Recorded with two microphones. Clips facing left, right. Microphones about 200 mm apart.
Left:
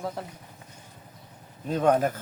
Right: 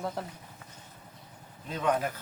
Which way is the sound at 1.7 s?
45° left (ahead or behind).